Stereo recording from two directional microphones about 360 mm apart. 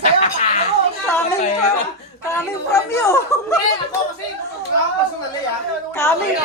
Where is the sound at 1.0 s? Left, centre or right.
Centre.